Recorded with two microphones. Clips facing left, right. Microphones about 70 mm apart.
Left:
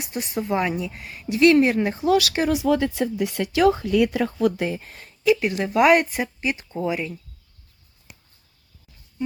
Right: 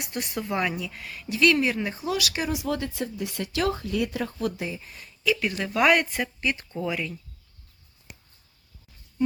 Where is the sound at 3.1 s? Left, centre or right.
Left.